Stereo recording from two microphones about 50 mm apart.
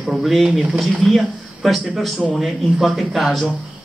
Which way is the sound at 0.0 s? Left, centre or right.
Centre.